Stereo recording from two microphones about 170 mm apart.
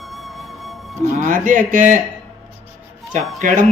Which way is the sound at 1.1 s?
50° right (ahead or behind).